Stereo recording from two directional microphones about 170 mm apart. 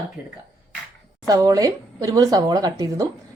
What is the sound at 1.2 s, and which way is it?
Speech, 20° right (ahead or behind).